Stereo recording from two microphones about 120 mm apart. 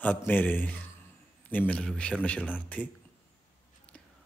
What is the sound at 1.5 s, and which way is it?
A man's voice, 10° left (ahead or behind).